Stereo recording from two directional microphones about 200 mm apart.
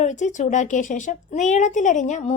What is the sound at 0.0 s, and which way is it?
A woman's voice, 40° left (ahead or behind).